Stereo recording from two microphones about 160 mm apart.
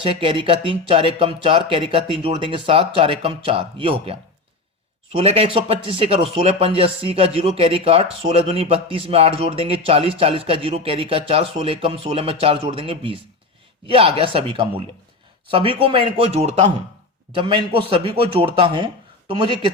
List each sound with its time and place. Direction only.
0.0 s speech: 35° right (ahead or behind)